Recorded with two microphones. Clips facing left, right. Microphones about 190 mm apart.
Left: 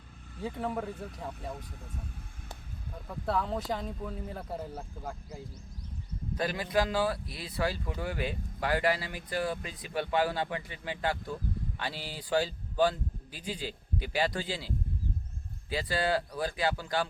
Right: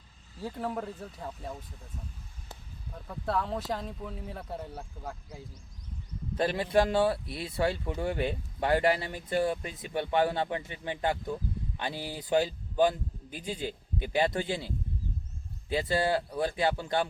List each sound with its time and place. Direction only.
0.4 s speech: centre (ahead or behind)
3.1 s speech: centre (ahead or behind)
6.3 s a man's voice: 30° right (ahead or behind)
15.7 s a man's voice: 25° right (ahead or behind)